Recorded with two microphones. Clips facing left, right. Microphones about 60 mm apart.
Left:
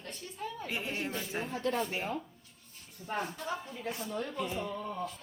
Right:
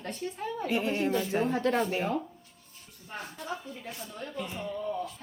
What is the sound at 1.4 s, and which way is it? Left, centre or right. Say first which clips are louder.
Speech: right 3 dB; right.